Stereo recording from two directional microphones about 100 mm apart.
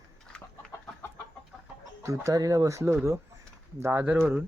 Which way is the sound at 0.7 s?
30° left (ahead or behind).